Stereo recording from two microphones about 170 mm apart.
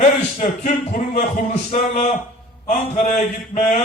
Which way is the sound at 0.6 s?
45° left (ahead or behind).